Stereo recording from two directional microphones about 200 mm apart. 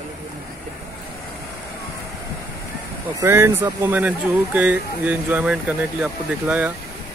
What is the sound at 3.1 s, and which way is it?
Speech, 15° right (ahead or behind).